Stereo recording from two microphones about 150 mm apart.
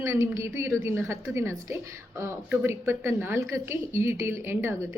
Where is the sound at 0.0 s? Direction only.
20° right (ahead or behind).